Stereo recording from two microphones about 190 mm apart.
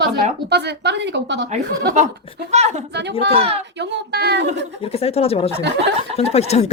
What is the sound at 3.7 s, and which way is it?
Speech, 65° right (ahead or behind).